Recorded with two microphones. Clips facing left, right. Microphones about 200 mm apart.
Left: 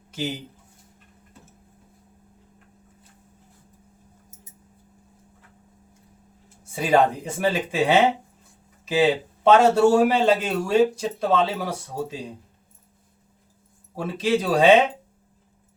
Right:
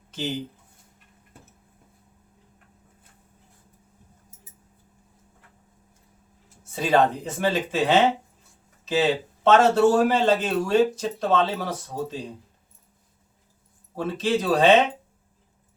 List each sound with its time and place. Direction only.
6.7 s a man's voice: 10° left (ahead or behind)
13.9 s a man's voice: 10° left (ahead or behind)